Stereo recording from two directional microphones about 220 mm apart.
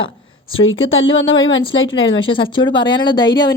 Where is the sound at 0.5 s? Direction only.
65° left (ahead or behind).